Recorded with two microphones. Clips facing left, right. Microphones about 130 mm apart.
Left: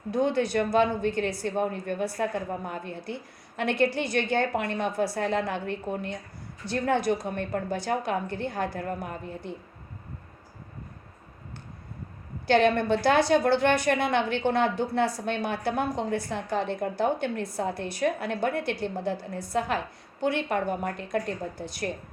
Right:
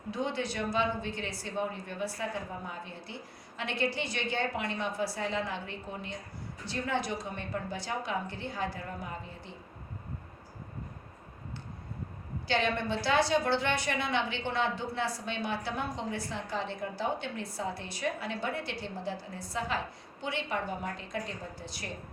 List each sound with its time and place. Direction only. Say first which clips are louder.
0.1 s a woman's voice: left 9 dB; 50° left (ahead or behind)
12.5 s a woman's voice: left 9 dB; 55° left (ahead or behind)